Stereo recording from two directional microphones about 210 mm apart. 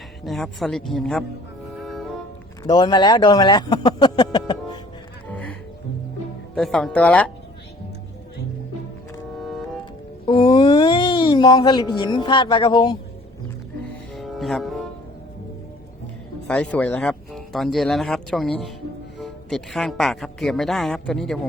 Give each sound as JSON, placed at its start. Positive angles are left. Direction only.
{"t": 0.3, "sound": "speech", "side_deg": 0}
{"t": 1.8, "sound": "music", "side_deg": 0}
{"t": 2.6, "sound": "speech", "side_deg": 20}
{"t": 5.3, "sound": "music", "side_deg": 5}
{"t": 6.5, "sound": "speech", "side_deg": 5}
{"t": 10.2, "sound": "speech", "side_deg": 25}
{"t": 14.1, "sound": "music", "side_deg": 0}
{"t": 16.5, "sound": "speech", "side_deg": 5}